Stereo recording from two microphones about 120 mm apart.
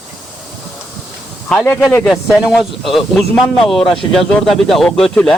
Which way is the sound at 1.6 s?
10° left (ahead or behind).